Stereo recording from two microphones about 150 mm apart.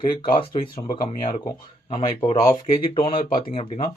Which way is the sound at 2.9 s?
35° left (ahead or behind).